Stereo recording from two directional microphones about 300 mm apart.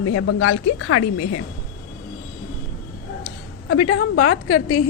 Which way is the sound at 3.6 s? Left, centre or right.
Left.